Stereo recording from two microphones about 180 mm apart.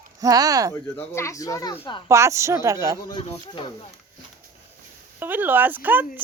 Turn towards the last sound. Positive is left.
turn(degrees=-10)  # may be behind; listen again after turning